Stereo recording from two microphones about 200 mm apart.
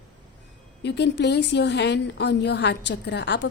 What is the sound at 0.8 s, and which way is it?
A woman's voice, 60° left (ahead or behind).